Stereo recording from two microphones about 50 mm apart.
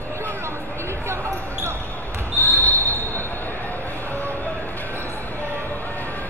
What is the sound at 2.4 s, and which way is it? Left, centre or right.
Basketball bounce, left.